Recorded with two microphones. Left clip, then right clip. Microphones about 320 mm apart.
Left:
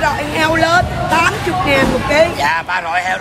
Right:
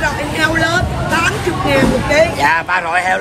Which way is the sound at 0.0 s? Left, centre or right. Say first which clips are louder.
Left 1 dB; centre.